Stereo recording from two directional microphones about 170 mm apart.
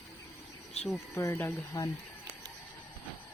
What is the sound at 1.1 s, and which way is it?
Speech, 15° left (ahead or behind).